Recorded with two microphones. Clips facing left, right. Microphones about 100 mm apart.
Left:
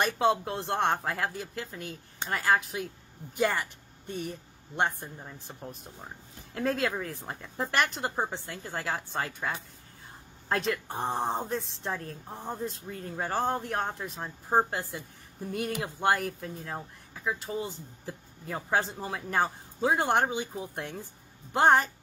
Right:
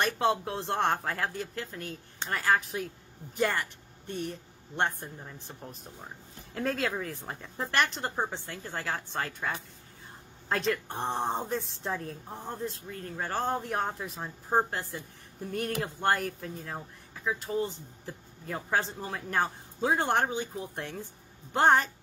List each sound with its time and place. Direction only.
0.0 s speech: centre (ahead or behind)
12.4 s speech: 10° left (ahead or behind)
13.3 s speech: 5° left (ahead or behind)
14.5 s speech: 10° left (ahead or behind)